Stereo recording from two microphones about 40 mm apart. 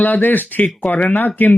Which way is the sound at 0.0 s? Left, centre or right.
Left.